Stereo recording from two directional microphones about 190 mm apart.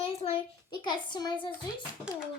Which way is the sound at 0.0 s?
30° left (ahead or behind).